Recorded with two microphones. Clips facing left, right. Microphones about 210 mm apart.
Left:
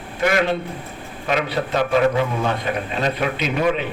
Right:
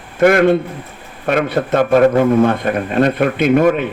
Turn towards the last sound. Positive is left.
turn(degrees=-50)  # may be behind; listen again after turning